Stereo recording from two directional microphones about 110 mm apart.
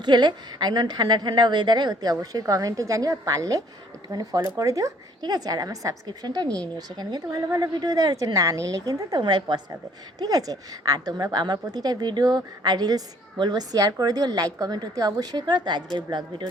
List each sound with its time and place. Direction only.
0.0 s a woman's voice: 40° right (ahead or behind)